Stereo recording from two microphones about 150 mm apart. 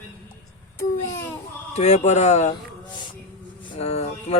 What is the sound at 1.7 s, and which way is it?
Speech, 50° left (ahead or behind).